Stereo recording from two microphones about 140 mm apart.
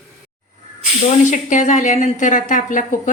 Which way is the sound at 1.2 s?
60° left (ahead or behind).